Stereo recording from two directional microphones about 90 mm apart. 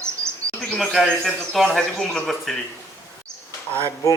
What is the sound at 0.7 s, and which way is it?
A man's voice, centre (ahead or behind).